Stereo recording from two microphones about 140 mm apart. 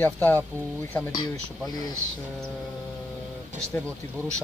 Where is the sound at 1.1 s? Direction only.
30° left (ahead or behind).